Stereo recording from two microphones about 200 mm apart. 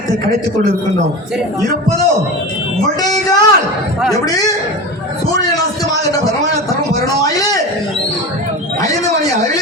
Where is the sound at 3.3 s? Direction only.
20° left (ahead or behind).